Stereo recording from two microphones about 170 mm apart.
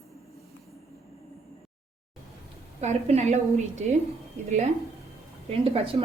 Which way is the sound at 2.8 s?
40° right (ahead or behind).